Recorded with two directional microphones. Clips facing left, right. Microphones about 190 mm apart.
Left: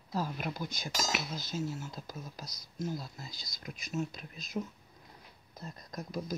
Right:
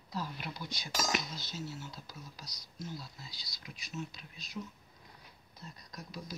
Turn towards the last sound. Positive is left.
turn(degrees=50)  # may be behind; listen again after turning